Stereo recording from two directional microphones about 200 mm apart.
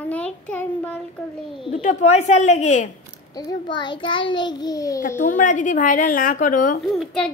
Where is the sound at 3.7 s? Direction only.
20° left (ahead or behind).